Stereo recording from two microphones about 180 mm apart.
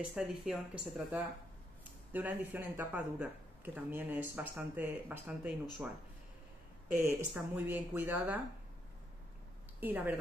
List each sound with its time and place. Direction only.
0.0 s speech: 5° right (ahead or behind)
6.9 s speech: 10° right (ahead or behind)
9.8 s speech: 10° right (ahead or behind)